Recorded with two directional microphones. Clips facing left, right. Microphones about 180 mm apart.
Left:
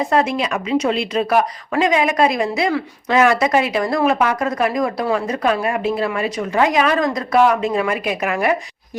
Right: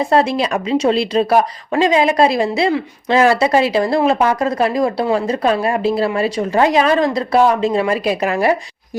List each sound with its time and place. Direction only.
0.0 s speech: 30° right (ahead or behind)